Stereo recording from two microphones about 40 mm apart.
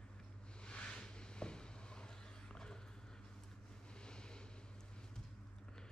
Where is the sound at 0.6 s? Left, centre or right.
Left.